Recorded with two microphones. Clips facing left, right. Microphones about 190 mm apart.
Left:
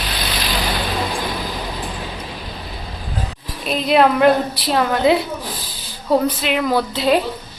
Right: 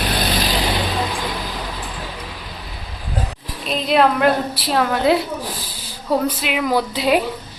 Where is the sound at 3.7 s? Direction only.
Centre (ahead or behind).